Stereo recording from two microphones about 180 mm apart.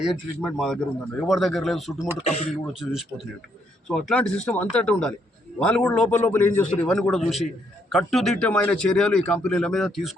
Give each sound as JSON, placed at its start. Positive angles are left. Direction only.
{"t": 0.0, "sound": "a man's voice", "side_deg": 0}
{"t": 2.2, "sound": "speech", "side_deg": 40}
{"t": 2.5, "sound": "a man's voice", "side_deg": 0}